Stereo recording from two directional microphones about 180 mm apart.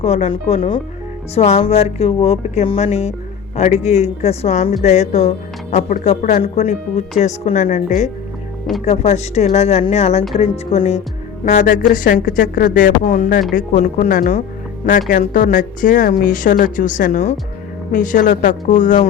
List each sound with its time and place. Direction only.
0.0 s speech: 35° left (ahead or behind)